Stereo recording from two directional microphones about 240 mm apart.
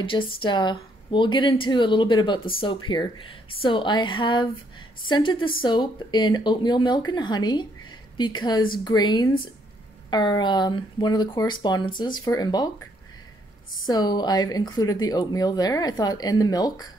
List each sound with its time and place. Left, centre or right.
0.0 s speech: left
13.8 s speech: centre